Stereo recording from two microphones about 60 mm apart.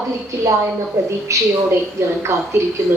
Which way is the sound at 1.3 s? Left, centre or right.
Right.